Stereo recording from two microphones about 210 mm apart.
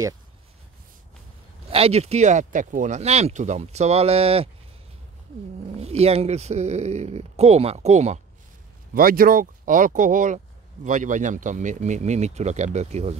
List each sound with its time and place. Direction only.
1.7 s speech: 30° right (ahead or behind)
5.8 s speech: 30° right (ahead or behind)
8.9 s speech: 45° right (ahead or behind)